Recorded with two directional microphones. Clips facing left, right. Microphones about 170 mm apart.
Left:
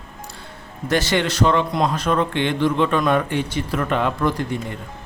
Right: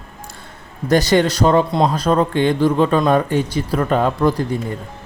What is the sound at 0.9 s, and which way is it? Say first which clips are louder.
A man's voice: right 6 dB; 40° right (ahead or behind).